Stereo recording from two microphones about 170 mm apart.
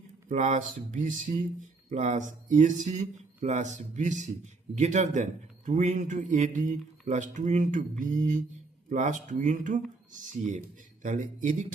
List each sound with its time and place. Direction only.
0.3 s speech: 45° right (ahead or behind)